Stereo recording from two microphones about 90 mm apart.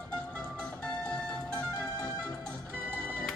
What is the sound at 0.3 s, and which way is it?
Music, 15° left (ahead or behind).